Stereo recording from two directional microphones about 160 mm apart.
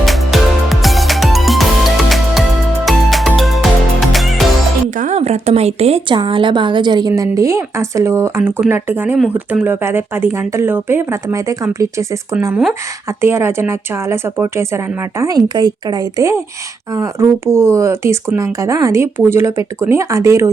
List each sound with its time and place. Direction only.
0.0 s music: centre (ahead or behind)
4.9 s speech: 45° right (ahead or behind); by 20.5 s 20° right (ahead or behind)